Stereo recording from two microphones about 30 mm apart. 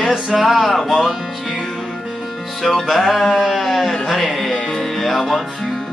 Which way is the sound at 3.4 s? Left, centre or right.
Centre.